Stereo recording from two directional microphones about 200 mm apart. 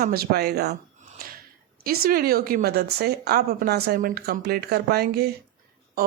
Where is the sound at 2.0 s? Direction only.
45° right (ahead or behind).